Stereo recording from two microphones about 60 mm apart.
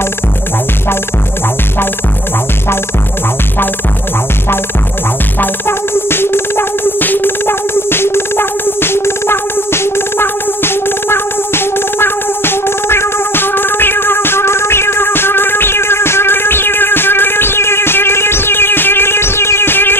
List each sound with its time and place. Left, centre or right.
5.4 s music: left